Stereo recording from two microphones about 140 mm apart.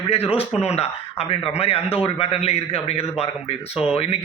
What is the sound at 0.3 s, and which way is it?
A man's voice, 50° left (ahead or behind).